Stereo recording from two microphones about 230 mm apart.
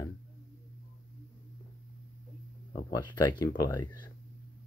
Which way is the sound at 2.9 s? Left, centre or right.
Centre.